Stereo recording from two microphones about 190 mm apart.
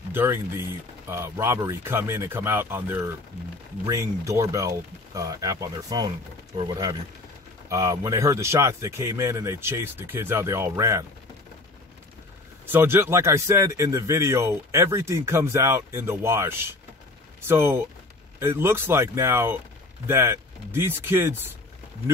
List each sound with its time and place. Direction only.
0.1 s a man's voice: 10° right (ahead or behind)
12.6 s a man's voice: 10° right (ahead or behind)